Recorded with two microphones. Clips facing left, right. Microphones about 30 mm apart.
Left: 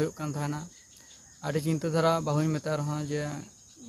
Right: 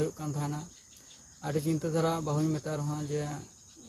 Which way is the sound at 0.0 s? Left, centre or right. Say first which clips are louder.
Left 2 dB; left.